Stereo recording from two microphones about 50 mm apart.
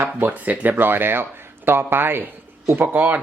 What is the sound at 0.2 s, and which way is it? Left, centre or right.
Speech, right.